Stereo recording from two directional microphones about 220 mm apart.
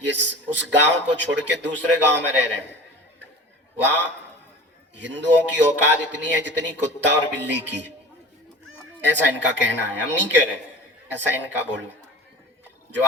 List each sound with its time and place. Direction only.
0.0 s a man's voice: 55° right (ahead or behind)
3.8 s a man's voice: 55° right (ahead or behind)
9.0 s speech: 55° right (ahead or behind)